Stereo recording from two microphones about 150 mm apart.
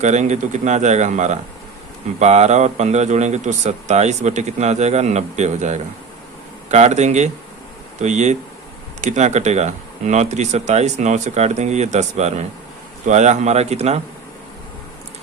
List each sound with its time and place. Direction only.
0.0 s speech: 50° right (ahead or behind)